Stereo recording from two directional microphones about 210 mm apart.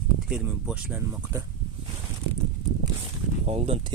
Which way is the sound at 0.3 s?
5° right (ahead or behind).